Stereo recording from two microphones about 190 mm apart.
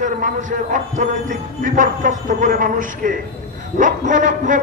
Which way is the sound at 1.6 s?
45° right (ahead or behind).